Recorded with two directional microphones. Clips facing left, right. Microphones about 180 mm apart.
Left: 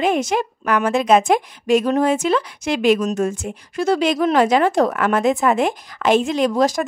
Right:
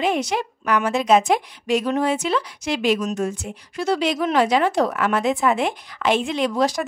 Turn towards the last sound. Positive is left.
turn(degrees=45)  # may be behind; listen again after turning